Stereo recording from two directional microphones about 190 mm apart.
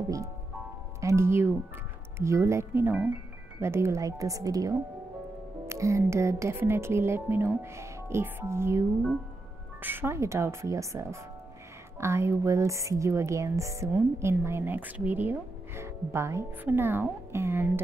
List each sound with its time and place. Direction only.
1.0 s a woman's voice: 15° right (ahead or behind)